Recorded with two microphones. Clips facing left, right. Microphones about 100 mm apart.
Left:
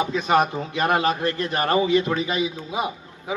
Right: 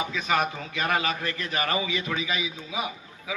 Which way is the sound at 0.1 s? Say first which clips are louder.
Left 6 dB; 35° left (ahead or behind).